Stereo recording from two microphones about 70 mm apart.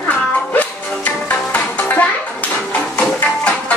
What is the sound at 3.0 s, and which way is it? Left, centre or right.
Music, centre.